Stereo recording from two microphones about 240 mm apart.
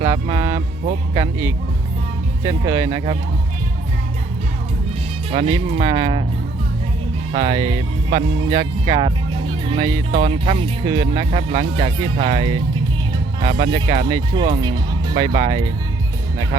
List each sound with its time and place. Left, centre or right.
0.0 s speech: centre
5.3 s speech: right
7.3 s speech: centre